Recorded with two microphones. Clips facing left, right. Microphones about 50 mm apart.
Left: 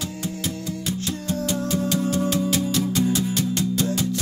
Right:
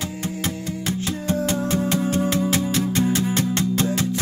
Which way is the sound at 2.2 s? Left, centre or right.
Right.